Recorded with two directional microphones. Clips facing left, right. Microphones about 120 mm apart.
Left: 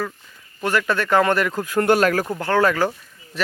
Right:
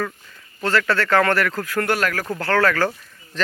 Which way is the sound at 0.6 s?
15° left (ahead or behind).